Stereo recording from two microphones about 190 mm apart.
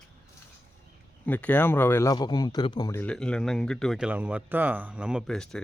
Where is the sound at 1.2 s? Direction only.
10° left (ahead or behind).